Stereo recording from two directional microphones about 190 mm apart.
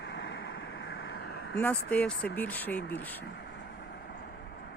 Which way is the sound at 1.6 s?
5° left (ahead or behind).